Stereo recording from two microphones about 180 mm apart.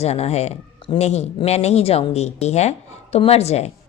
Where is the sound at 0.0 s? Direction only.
35° left (ahead or behind).